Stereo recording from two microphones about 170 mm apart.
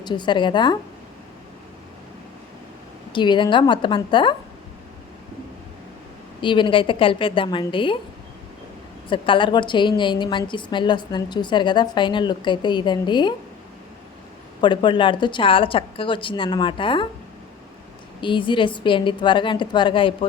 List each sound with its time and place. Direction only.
0.0 s a woman's voice: 25° left (ahead or behind)
3.1 s a woman's voice: 25° left (ahead or behind)
6.4 s a woman's voice: 30° left (ahead or behind)
9.0 s a woman's voice: 30° left (ahead or behind)
14.6 s a woman's voice: 25° left (ahead or behind)
18.2 s a woman's voice: 30° left (ahead or behind)